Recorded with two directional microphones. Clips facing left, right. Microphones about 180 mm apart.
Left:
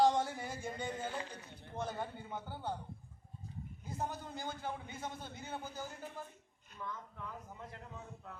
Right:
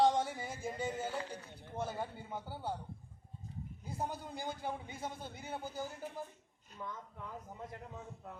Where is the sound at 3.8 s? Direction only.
10° right (ahead or behind).